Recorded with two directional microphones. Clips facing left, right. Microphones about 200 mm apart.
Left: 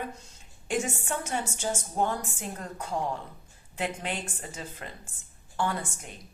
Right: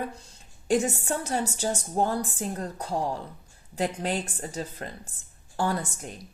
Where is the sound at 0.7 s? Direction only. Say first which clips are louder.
Right 5 dB; 35° right (ahead or behind).